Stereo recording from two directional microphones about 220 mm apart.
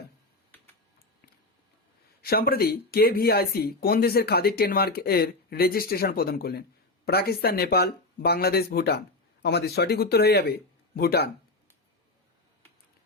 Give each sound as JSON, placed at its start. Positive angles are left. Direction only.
{"t": 2.2, "sound": "speech", "side_deg": 45}